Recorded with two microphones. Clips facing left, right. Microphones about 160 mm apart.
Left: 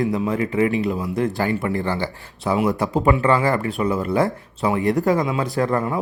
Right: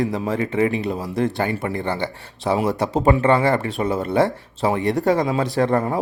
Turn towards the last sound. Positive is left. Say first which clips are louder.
# right 2 dB
turn(degrees=-35)  # may be behind; listen again after turning